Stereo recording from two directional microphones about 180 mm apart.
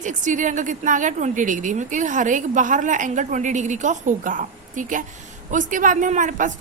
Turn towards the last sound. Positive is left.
turn(degrees=-45)  # may be behind; listen again after turning